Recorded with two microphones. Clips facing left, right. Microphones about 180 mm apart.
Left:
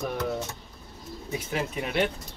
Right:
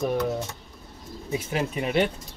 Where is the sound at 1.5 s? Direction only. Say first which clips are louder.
Right 3 dB; 20° right (ahead or behind).